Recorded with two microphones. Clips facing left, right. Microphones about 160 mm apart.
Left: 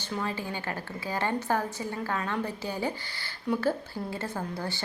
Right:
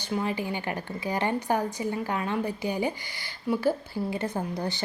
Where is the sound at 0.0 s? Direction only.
15° right (ahead or behind).